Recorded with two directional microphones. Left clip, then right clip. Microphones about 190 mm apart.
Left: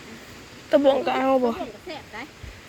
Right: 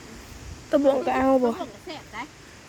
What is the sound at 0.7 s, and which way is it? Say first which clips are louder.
Speech: left 2 dB; 30° right (ahead or behind).